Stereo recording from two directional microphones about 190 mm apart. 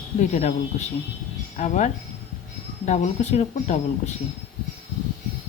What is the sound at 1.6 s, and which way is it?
Speech, 40° left (ahead or behind).